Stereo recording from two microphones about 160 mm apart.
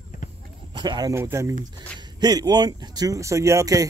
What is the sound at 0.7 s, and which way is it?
Speech, 25° right (ahead or behind).